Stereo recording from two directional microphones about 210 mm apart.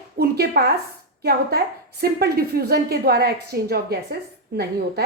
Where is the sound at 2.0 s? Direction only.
45° right (ahead or behind).